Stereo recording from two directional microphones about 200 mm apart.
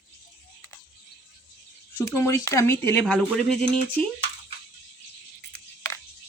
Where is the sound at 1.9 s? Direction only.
15° left (ahead or behind).